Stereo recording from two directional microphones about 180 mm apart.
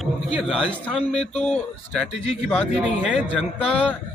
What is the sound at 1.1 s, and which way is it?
Speech, 35° left (ahead or behind).